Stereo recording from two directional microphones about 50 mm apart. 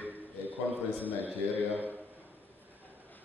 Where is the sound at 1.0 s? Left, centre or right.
Right.